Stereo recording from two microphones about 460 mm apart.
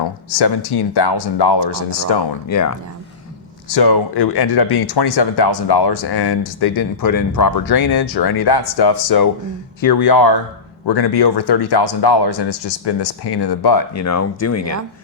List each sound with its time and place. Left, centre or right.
0.0 s speech: left
2.0 s speech: left
3.8 s speech: left
13.9 s speech: left